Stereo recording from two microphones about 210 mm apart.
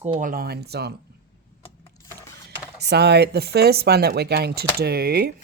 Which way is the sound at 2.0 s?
15° left (ahead or behind).